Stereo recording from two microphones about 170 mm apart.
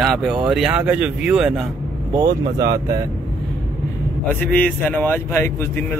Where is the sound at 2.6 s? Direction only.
20° right (ahead or behind).